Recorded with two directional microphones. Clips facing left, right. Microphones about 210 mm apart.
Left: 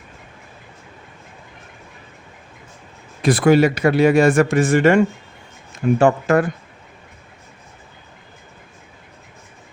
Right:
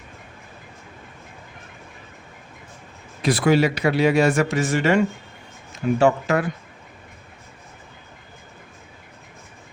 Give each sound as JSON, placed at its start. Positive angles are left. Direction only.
{"t": 3.2, "sound": "a man's voice", "side_deg": 50}